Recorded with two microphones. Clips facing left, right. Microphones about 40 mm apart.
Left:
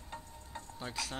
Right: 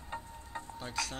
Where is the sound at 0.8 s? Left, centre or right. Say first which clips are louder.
Right 2 dB; centre.